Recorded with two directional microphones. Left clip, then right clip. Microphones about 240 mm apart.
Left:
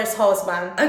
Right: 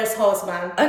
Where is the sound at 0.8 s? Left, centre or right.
Centre.